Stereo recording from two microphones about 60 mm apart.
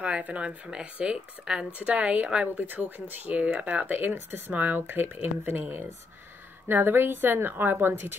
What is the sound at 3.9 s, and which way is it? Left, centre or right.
A woman's voice, right.